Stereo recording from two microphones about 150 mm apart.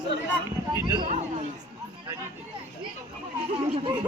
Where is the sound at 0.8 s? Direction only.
25° right (ahead or behind).